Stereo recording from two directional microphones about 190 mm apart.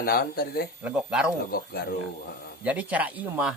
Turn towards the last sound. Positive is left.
turn(degrees=-5)  # may be behind; listen again after turning